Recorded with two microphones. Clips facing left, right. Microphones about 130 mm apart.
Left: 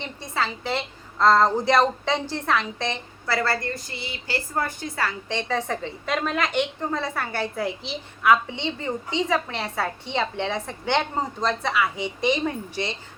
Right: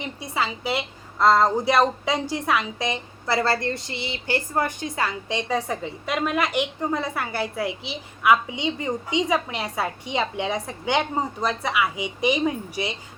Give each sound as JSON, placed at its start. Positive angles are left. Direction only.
{"t": 0.0, "sound": "a woman's voice", "side_deg": -10}